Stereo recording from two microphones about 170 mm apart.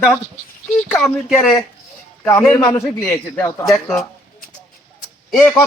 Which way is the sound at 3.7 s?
Centre (ahead or behind).